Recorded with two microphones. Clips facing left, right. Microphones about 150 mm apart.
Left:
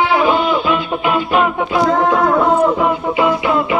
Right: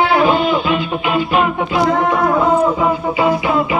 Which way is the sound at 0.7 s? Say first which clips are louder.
Left 1 dB; 55° left (ahead or behind).